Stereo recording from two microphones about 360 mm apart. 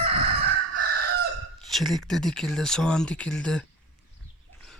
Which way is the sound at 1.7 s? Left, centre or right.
Centre.